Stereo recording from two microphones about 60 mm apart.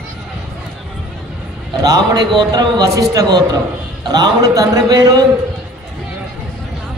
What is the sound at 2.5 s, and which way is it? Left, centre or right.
Speech, right.